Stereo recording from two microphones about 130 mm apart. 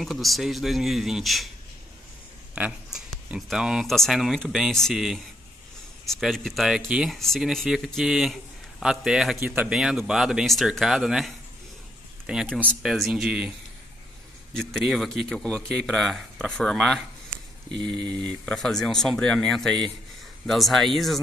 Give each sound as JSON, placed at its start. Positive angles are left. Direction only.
{"t": 0.0, "sound": "speech", "side_deg": 0}
{"t": 2.5, "sound": "a sound", "side_deg": -10}
{"t": 3.3, "sound": "speech", "side_deg": 0}
{"t": 14.5, "sound": "speech", "side_deg": 5}
{"t": 17.7, "sound": "speech", "side_deg": -35}
{"t": 18.2, "sound": "speech", "side_deg": 5}